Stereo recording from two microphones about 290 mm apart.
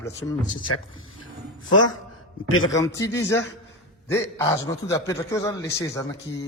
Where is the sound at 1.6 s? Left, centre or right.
Left.